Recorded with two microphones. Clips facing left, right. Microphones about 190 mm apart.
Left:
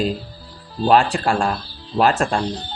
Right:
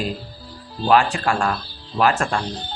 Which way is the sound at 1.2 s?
30° left (ahead or behind).